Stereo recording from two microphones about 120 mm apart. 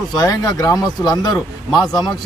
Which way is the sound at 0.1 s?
30° left (ahead or behind).